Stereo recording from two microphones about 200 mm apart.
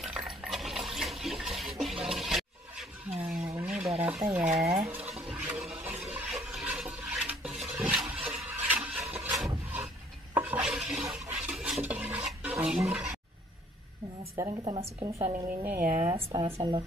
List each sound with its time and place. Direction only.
0.0 s water: 5° right (ahead or behind)
2.0 s toilet flush: centre (ahead or behind)
3.2 s vehicle: centre (ahead or behind)
3.5 s a sound: 5° right (ahead or behind)
4.0 s stir: 5° right (ahead or behind)
4.7 s speech: 10° right (ahead or behind)
5.1 s a sound: 5° right (ahead or behind)
10.3 s a sound: 5° right (ahead or behind)
14.3 s a woman's voice: 20° right (ahead or behind)
15.6 s speech: 10° right (ahead or behind)
16.1 s a woman's voice: 25° right (ahead or behind)